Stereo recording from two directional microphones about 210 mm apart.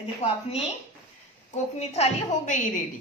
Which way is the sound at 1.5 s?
30° left (ahead or behind).